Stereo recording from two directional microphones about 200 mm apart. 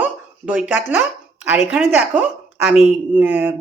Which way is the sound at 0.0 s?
5° right (ahead or behind).